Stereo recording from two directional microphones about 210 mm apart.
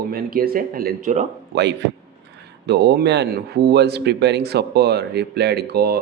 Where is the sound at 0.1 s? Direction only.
45° right (ahead or behind).